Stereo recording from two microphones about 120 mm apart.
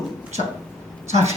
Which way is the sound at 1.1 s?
65° right (ahead or behind).